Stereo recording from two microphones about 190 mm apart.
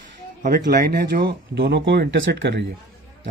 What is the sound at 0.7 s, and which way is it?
Speech, 50° right (ahead or behind).